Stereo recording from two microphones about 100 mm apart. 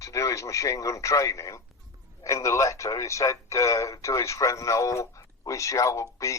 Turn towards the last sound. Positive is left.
turn(degrees=30)  # may be behind; listen again after turning